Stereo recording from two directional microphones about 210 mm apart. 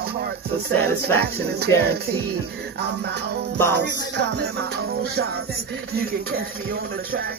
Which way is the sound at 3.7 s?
55° right (ahead or behind).